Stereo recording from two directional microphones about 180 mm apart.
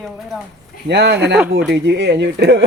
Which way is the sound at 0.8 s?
65° right (ahead or behind).